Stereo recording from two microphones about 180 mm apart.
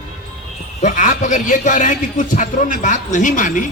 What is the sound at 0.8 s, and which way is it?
A man's voice, 45° left (ahead or behind).